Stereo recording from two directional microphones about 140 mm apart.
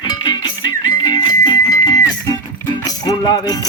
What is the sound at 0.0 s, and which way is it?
Music, 35° left (ahead or behind).